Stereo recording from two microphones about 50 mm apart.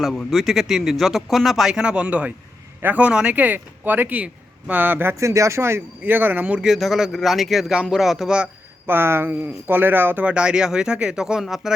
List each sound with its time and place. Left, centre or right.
0.3 s speech: centre
1.7 s speech: centre; by 5.0 s right
5.1 s speech: right
6.0 s speech: right
6.6 s speech: centre
7.7 s speech: centre
8.9 s speech: right
10.2 s speech: centre